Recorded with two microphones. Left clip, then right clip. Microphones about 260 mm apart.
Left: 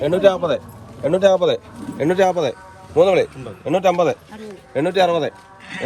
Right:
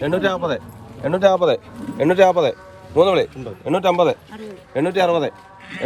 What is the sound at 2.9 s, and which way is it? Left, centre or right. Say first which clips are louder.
Speech: left 1 dB; centre.